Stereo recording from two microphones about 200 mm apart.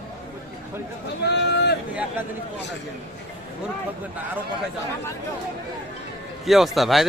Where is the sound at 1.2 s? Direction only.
55° left (ahead or behind).